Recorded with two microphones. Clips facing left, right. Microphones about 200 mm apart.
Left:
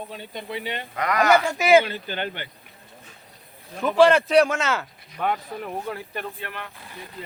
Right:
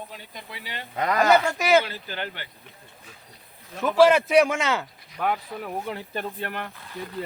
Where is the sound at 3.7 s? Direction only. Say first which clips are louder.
Left 1 dB; centre (ahead or behind).